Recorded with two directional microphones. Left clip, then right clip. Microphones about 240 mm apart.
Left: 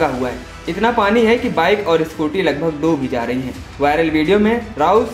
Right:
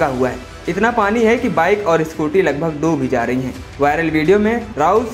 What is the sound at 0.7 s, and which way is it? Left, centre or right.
Speech, right.